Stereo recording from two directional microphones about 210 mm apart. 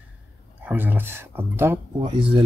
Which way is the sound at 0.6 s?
10° right (ahead or behind).